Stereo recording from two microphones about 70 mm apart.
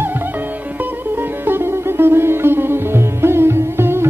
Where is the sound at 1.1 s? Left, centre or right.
Right.